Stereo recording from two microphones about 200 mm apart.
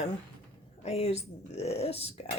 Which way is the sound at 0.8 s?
30° left (ahead or behind).